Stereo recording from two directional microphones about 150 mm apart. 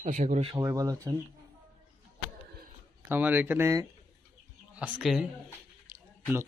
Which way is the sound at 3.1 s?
10° right (ahead or behind).